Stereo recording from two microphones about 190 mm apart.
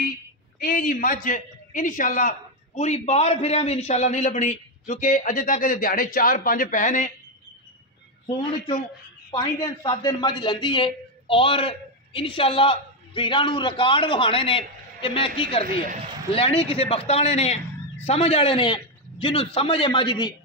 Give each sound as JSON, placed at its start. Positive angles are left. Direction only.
{"t": 0.6, "sound": "a man's voice", "side_deg": 45}
{"t": 9.3, "sound": "a man's voice", "side_deg": 25}
{"t": 15.6, "sound": "a man's voice", "side_deg": -50}
{"t": 16.3, "sound": "a man's voice", "side_deg": 30}